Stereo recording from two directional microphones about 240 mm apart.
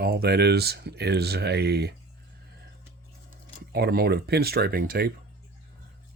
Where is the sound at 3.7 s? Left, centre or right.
Right.